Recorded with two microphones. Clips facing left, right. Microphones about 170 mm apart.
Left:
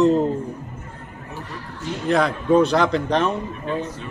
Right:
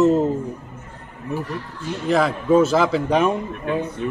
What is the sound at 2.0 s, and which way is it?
Speech, centre (ahead or behind).